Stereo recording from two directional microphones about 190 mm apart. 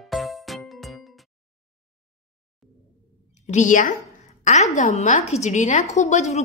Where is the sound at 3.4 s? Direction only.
40° left (ahead or behind).